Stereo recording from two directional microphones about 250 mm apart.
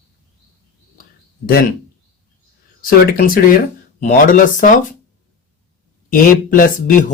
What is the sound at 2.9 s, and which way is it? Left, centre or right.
Speech, left.